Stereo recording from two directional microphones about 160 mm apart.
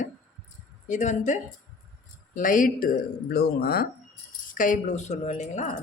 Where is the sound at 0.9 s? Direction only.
50° left (ahead or behind); by 3.8 s 75° left (ahead or behind).